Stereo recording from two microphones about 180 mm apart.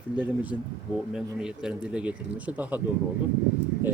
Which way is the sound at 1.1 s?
5° right (ahead or behind).